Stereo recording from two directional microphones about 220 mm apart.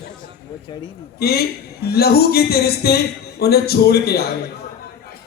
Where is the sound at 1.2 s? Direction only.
45° left (ahead or behind).